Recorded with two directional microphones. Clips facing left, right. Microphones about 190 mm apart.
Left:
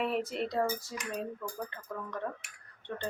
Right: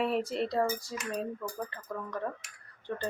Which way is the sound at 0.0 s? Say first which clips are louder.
Right 2 dB; centre (ahead or behind).